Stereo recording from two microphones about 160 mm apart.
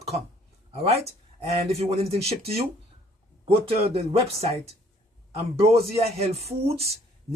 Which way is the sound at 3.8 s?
40° right (ahead or behind).